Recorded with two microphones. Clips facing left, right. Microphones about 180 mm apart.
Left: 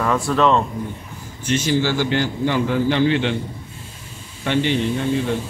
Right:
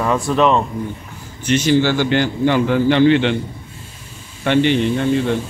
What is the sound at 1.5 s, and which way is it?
A man's voice, 70° right (ahead or behind).